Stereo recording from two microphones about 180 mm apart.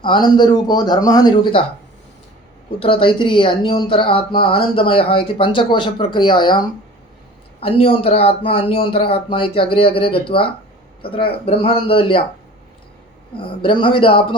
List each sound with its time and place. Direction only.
0.0 s speech: 25° left (ahead or behind)
2.7 s speech: 30° left (ahead or behind)
13.3 s speech: 30° left (ahead or behind)